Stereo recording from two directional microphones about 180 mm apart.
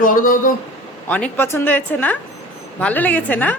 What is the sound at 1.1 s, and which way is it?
Speech, 10° left (ahead or behind).